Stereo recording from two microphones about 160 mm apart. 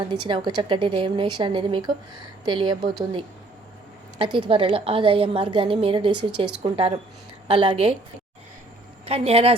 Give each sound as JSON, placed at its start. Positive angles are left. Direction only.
{"t": 0.0, "sound": "a woman's voice", "side_deg": -30}
{"t": 9.0, "sound": "a woman's voice", "side_deg": -40}